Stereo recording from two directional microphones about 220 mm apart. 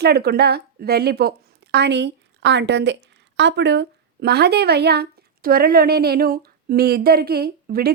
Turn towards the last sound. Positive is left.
turn(degrees=-45)  # may be behind; listen again after turning